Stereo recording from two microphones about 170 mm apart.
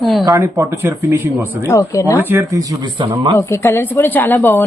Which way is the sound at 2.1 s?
15° right (ahead or behind).